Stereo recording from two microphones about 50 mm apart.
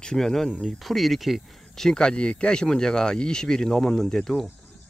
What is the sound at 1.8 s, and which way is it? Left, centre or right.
Speech, centre.